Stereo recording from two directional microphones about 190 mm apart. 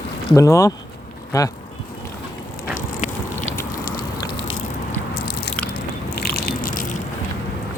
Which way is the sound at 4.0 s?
25° left (ahead or behind).